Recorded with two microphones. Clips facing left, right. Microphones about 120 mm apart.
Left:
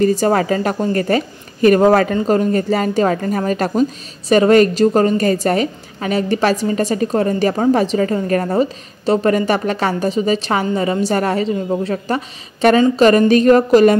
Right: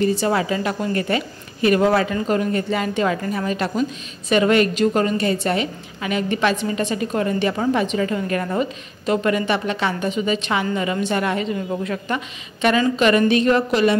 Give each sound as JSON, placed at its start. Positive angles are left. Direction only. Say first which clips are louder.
{"t": 0.0, "sound": "a woman's voice", "louder": "left 5 dB", "side_deg": 45}